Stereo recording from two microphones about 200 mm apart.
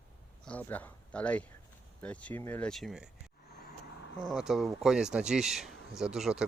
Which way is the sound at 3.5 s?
55° left (ahead or behind).